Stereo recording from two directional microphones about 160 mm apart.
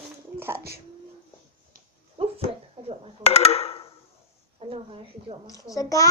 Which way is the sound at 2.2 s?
35° right (ahead or behind).